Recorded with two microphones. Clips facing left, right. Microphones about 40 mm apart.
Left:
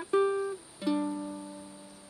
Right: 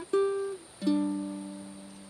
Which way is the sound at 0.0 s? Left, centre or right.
Left.